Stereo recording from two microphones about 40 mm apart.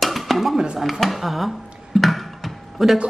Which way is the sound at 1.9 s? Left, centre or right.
Centre.